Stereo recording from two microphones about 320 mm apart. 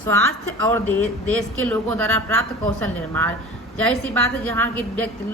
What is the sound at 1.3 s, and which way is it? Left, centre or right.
Speech, right.